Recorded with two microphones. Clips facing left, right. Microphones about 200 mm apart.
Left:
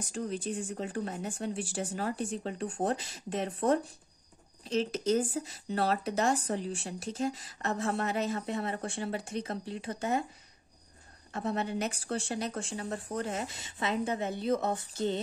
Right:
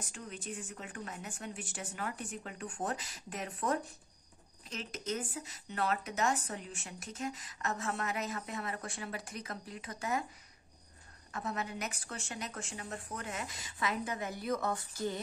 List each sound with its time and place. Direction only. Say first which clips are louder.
0.0 s speech: left 10 dB; 35° left (ahead or behind)
11.3 s speech: left 6 dB; 30° left (ahead or behind)